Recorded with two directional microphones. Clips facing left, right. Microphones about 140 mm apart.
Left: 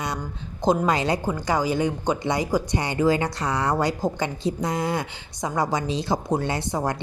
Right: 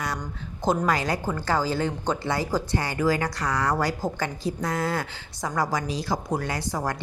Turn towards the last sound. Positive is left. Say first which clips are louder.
# left 3 dB
turn(degrees=25)  # may be behind; listen again after turning